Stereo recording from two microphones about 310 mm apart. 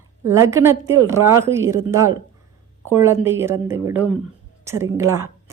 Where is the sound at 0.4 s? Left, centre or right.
Centre.